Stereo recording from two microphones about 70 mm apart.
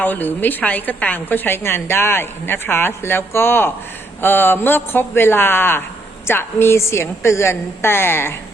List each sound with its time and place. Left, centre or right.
0.0 s a woman's voice: left